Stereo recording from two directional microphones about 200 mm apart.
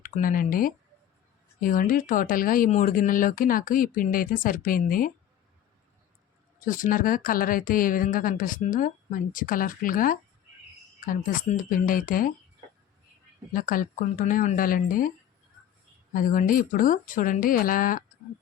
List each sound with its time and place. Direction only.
0.0 s speech: 40° left (ahead or behind)
6.7 s speech: 40° left (ahead or behind)
13.5 s speech: 45° left (ahead or behind)
16.1 s speech: 40° left (ahead or behind)